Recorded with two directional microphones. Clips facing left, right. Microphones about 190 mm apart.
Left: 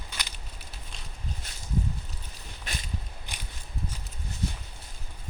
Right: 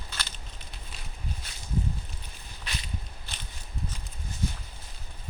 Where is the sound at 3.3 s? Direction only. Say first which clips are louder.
Left 1 dB; 15° left (ahead or behind).